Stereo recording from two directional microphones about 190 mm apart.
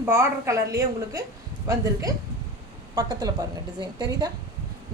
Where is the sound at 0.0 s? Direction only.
15° right (ahead or behind).